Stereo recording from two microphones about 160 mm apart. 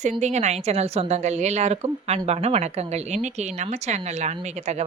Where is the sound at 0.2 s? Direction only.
45° right (ahead or behind).